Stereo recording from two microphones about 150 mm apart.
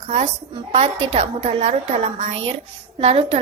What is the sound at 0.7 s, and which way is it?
A woman's voice, 50° right (ahead or behind).